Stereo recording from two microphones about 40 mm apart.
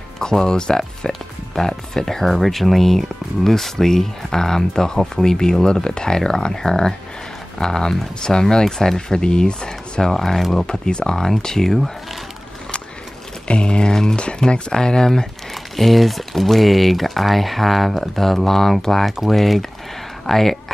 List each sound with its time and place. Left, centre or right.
0.2 s speech: centre
10.0 s speech: centre
10.7 s speech: left
13.5 s speech: left
15.5 s speech: centre